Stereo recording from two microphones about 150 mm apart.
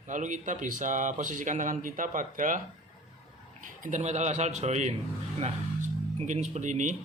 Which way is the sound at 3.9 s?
50° right (ahead or behind).